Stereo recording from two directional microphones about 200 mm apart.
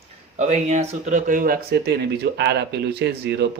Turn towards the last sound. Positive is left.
turn(degrees=-55)  # may be behind; listen again after turning